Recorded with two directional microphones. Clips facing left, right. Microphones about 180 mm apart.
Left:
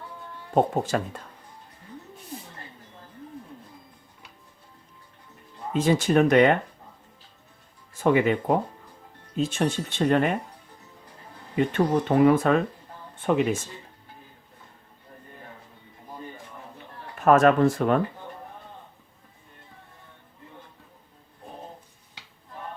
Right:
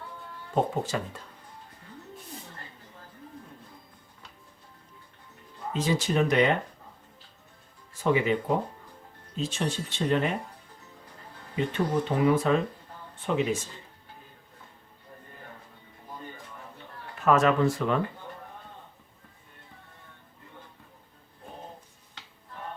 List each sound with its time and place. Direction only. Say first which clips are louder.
0.5 s speech: left 5 dB; 55° left (ahead or behind)
5.7 s speech: left 6 dB; 55° left (ahead or behind)
7.9 s speech: left 4 dB; 55° left (ahead or behind)
11.5 s speech: left 5 dB; 55° left (ahead or behind)
17.2 s speech: left 5 dB; 50° left (ahead or behind)